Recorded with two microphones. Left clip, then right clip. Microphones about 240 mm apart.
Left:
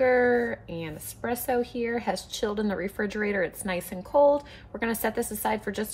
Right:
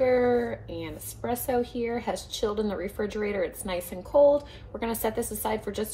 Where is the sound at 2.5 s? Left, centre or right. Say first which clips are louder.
Even; left.